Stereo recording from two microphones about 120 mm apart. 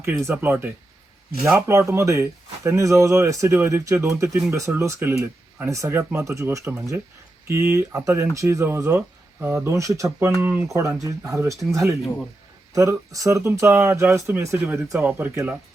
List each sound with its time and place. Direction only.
0.0 s speech: 20° right (ahead or behind)